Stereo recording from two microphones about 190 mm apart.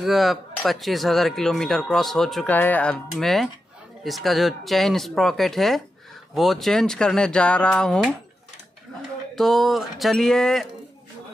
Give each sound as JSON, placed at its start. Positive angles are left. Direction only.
{"t": 0.0, "sound": "speech", "side_deg": 0}
{"t": 9.3, "sound": "speech", "side_deg": 0}